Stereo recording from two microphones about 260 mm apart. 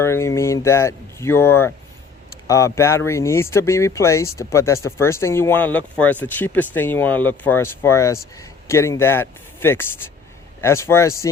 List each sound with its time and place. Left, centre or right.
0.0 s speech: centre